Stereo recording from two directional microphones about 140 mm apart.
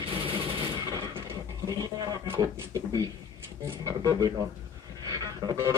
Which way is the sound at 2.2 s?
15° right (ahead or behind).